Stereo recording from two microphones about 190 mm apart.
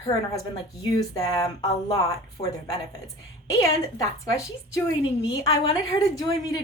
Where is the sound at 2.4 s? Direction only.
30° left (ahead or behind).